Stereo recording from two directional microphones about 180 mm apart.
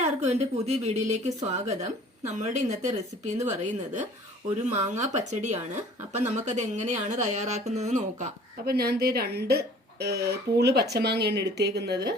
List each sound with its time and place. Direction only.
0.0 s a woman's voice: 40° right (ahead or behind)
8.6 s speech: 60° right (ahead or behind)